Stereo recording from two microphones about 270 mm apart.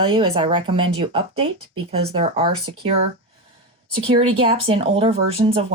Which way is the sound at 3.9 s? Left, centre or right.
Centre.